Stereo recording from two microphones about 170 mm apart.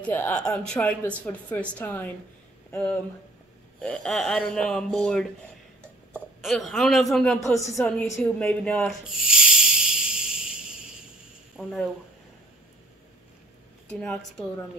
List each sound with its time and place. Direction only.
0.0 s speech: 10° left (ahead or behind)
6.4 s speech: centre (ahead or behind)
7.3 s speech: 20° left (ahead or behind)
7.6 s speech: centre (ahead or behind)
9.2 s a sound: 5° right (ahead or behind)
11.5 s speech: 5° right (ahead or behind)
13.9 s speech: 5° left (ahead or behind)